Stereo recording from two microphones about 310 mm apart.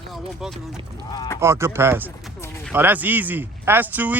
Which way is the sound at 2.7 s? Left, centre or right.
Centre.